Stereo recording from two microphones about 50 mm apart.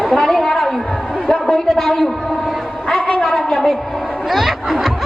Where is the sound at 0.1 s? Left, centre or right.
Centre.